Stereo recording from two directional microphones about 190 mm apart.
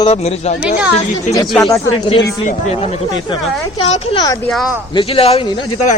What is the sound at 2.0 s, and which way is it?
Speech, 20° left (ahead or behind).